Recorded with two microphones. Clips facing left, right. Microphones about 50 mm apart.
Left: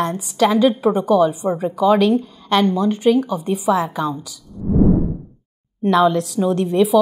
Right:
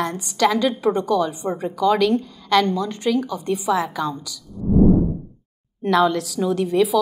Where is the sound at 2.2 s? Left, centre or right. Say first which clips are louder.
Left 1 dB; left.